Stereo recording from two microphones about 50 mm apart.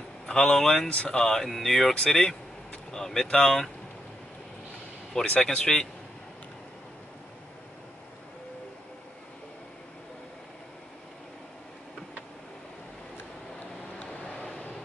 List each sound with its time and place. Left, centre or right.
0.3 s speech: centre
0.8 s speech: left
1.2 s speech: centre
5.1 s speech: centre
14.2 s vehicle: centre